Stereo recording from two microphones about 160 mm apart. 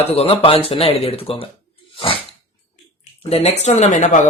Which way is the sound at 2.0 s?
35° left (ahead or behind).